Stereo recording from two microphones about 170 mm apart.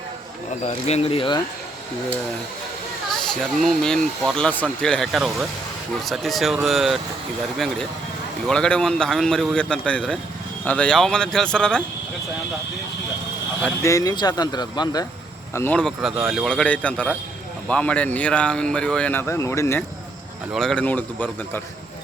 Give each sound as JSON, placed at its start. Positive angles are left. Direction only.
{"t": 0.6, "sound": "speech", "side_deg": 40}
{"t": 3.1, "sound": "speech", "side_deg": 5}
{"t": 8.4, "sound": "speech", "side_deg": 5}
{"t": 13.8, "sound": "speech", "side_deg": 20}
{"t": 15.5, "sound": "speech", "side_deg": 10}
{"t": 20.5, "sound": "speech", "side_deg": 5}